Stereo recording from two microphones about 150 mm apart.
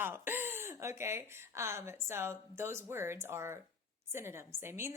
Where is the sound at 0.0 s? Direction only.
15° right (ahead or behind).